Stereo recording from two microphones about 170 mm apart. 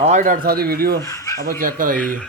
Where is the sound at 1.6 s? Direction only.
55° right (ahead or behind).